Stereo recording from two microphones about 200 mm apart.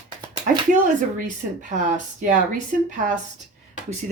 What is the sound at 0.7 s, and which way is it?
Speech, 40° right (ahead or behind).